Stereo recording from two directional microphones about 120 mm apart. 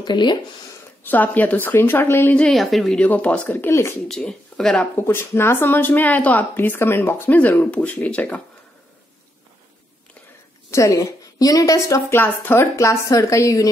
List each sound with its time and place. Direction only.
0.0 s speech: 40° left (ahead or behind)
1.0 s speech: 15° left (ahead or behind)
2.4 s speech: centre (ahead or behind); by 3.9 s 20° left (ahead or behind)
4.1 s speech: 5° left (ahead or behind)
4.9 s speech: 20° left (ahead or behind)
10.7 s a woman's voice: 25° left (ahead or behind)